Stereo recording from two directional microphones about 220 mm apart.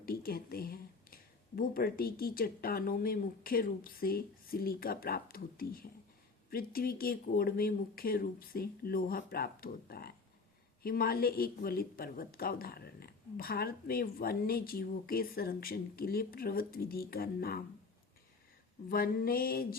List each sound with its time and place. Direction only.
0.0 s a woman's voice: 40° left (ahead or behind)
18.9 s a woman's voice: 40° left (ahead or behind)